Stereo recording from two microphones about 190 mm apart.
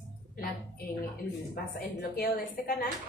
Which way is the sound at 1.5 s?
55° left (ahead or behind).